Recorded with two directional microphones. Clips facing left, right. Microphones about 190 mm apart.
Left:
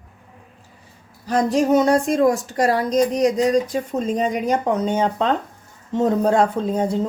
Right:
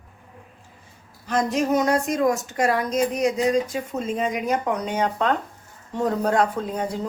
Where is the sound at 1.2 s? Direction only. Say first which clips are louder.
Left 4 dB; 35° left (ahead or behind).